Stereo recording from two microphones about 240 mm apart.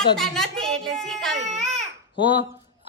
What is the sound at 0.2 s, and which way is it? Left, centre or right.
A woman's voice, centre.